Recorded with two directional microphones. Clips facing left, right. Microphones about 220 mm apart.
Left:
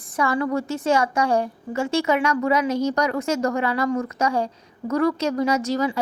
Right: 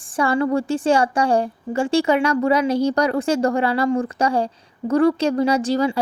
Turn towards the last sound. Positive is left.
turn(degrees=-30)  # may be behind; listen again after turning